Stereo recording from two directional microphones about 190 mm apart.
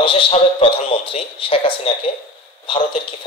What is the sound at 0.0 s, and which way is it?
Speech, 25° left (ahead or behind).